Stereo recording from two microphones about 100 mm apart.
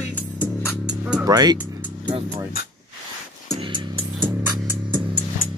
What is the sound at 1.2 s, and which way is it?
Speech, 40° right (ahead or behind).